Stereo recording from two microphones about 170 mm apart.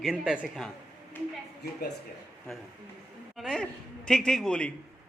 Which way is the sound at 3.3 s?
5° left (ahead or behind).